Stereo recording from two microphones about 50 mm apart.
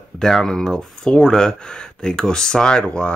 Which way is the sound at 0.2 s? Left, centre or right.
Centre.